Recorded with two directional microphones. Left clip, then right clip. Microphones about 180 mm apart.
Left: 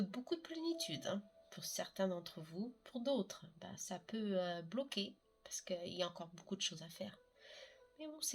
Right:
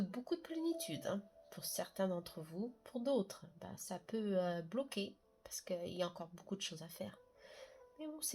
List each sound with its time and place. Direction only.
0.1 s a sound: 35° right (ahead or behind)
2.4 s speech: 40° right (ahead or behind)
6.5 s music: 35° right (ahead or behind)